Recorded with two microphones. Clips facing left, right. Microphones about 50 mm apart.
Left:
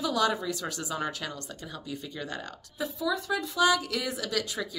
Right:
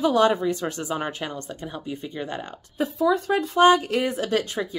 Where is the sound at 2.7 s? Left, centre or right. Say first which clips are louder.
Right 9 dB; right.